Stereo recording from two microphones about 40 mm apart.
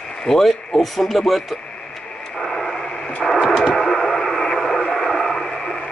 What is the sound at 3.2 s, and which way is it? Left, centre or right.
Radio, centre.